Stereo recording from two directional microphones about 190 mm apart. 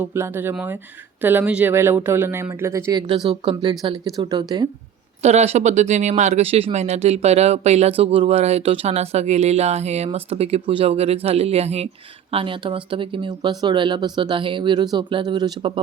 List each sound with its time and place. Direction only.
0.0 s speech: 15° right (ahead or behind)
3.2 s speech: 25° right (ahead or behind)
5.2 s speech: 35° right (ahead or behind)